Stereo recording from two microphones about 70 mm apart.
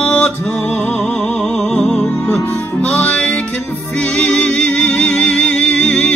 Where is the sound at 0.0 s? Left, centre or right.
Centre.